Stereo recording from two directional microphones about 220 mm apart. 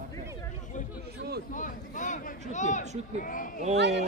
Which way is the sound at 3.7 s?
50° right (ahead or behind).